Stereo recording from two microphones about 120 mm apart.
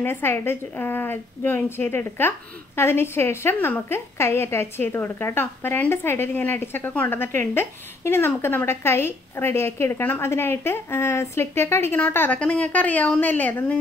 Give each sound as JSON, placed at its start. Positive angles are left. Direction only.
{"t": 0.0, "sound": "a woman's voice", "side_deg": 20}